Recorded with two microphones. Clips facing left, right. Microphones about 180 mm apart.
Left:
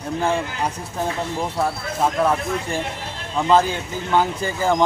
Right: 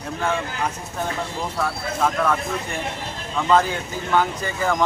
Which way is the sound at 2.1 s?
30° left (ahead or behind).